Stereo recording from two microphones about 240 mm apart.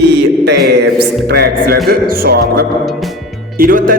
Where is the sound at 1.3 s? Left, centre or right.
Right.